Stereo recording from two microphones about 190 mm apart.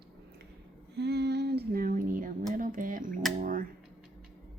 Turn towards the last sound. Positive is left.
turn(degrees=-45)  # may be behind; listen again after turning